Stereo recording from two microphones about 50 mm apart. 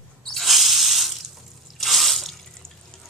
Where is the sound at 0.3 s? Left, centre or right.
Centre.